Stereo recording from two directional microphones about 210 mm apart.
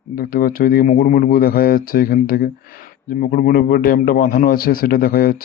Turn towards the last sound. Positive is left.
turn(degrees=45)  # may be behind; listen again after turning